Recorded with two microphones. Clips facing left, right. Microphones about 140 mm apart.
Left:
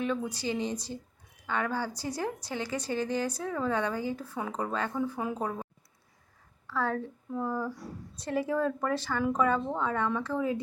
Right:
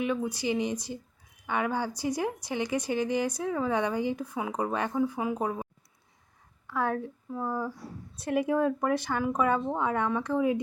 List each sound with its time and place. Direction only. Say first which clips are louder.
0.0 s speech: right 2 dB; 15° right (ahead or behind)
6.7 s speech: right 1 dB; 15° right (ahead or behind)